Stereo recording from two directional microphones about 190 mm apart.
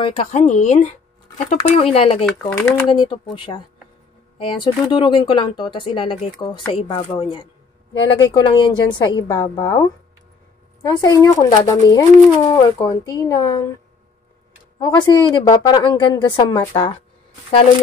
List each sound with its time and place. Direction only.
0.0 s speech: 30° left (ahead or behind)
2.4 s speech: 15° left (ahead or behind)
3.3 s speech: 25° left (ahead or behind)
14.8 s speech: 20° left (ahead or behind)